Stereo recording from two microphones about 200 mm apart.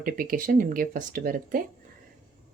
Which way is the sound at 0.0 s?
45° right (ahead or behind).